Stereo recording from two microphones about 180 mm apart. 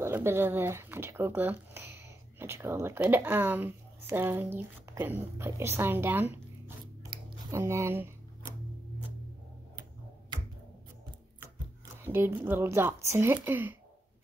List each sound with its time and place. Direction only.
0.0 s speech: 15° right (ahead or behind)
7.0 s a sound: 25° right (ahead or behind)
7.5 s speech: 15° right (ahead or behind)
11.3 s speech: 15° right (ahead or behind)